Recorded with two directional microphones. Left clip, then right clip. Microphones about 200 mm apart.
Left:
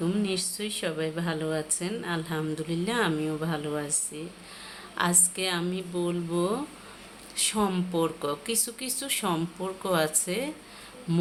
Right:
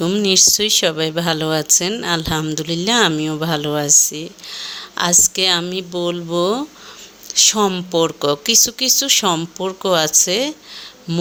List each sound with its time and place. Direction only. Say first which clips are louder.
0.0 s speech: right 15 dB; 50° right (ahead or behind)
11.1 s insect: right 7 dB; 35° right (ahead or behind)